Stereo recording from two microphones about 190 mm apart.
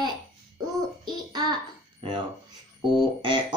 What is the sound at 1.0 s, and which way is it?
Child singing, 20° right (ahead or behind).